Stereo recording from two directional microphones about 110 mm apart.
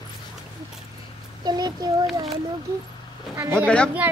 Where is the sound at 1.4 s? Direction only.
40° right (ahead or behind).